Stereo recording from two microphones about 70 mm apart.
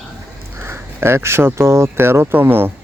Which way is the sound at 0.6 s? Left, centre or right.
Right.